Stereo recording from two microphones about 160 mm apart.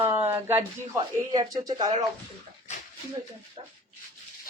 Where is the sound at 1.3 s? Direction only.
25° right (ahead or behind).